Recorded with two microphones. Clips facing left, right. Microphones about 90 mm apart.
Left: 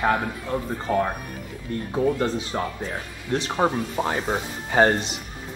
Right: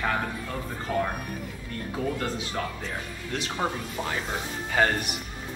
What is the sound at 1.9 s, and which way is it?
A man's voice, 25° left (ahead or behind).